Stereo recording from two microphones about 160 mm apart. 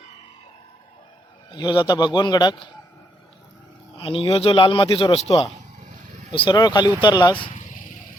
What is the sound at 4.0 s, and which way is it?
A man's voice, 35° left (ahead or behind).